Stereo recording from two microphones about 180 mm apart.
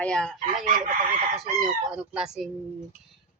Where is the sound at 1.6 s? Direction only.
5° right (ahead or behind).